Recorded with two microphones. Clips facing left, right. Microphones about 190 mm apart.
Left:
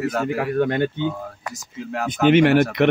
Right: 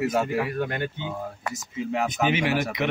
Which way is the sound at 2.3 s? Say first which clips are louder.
Left 10 dB; 65° left (ahead or behind).